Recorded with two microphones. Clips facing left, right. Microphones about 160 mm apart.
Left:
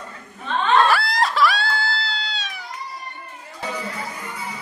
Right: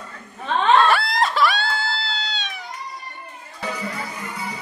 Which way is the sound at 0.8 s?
Centre (ahead or behind).